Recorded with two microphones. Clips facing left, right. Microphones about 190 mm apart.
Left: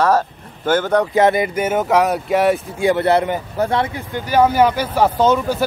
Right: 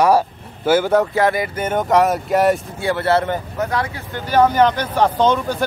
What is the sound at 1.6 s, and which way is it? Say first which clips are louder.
Speech: right 3 dB; 5° left (ahead or behind).